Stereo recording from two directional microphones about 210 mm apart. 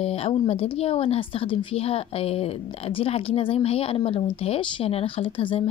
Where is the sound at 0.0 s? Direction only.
30° left (ahead or behind).